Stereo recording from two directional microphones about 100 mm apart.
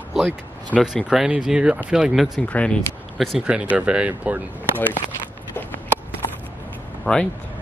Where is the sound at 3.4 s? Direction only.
10° right (ahead or behind).